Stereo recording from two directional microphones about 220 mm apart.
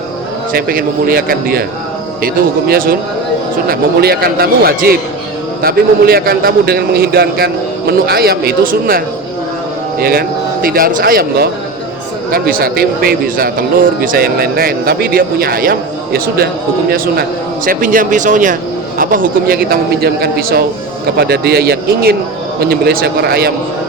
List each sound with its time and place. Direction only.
0.5 s speech: 40° right (ahead or behind)
17.7 s speech: 40° right (ahead or behind)